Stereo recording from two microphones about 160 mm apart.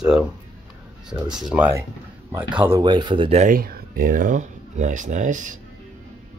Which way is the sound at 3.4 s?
65° right (ahead or behind).